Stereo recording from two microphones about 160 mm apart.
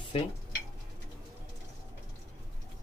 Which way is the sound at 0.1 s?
35° left (ahead or behind).